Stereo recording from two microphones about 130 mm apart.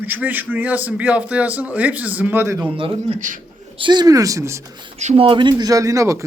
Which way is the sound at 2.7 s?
45° right (ahead or behind).